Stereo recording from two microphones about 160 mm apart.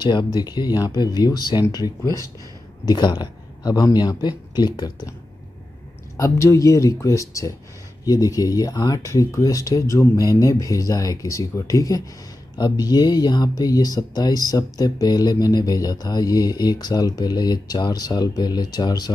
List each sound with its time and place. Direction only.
0.0 s speech: 30° left (ahead or behind)
6.1 s speech: 20° left (ahead or behind)